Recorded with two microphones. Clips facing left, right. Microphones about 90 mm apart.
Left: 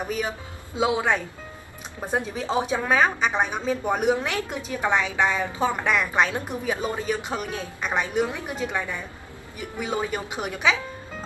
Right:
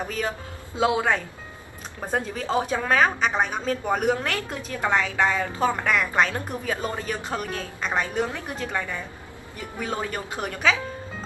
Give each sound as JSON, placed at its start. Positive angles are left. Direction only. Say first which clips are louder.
{"t": 0.0, "sound": "a woman's voice", "louder": "even", "side_deg": 15}